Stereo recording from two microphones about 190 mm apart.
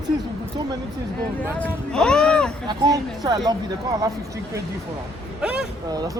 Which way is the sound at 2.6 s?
20° right (ahead or behind).